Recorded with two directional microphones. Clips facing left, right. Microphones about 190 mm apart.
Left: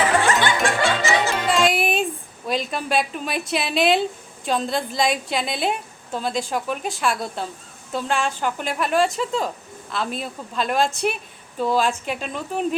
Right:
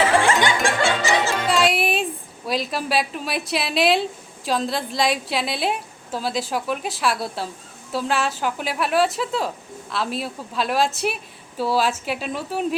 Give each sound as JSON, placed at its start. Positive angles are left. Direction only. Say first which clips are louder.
{"t": 0.0, "sound": "snicker", "louder": "right 1 dB", "side_deg": -30}
{"t": 1.3, "sound": "music", "louder": "even", "side_deg": 0}
{"t": 2.5, "sound": "a woman's voice", "louder": "even", "side_deg": 0}